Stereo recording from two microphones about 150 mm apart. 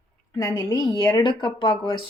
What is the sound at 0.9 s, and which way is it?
Speech, 30° left (ahead or behind).